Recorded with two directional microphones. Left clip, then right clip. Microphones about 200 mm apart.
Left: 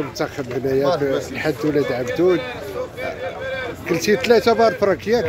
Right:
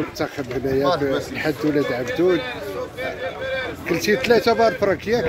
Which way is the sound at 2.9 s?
55° left (ahead or behind).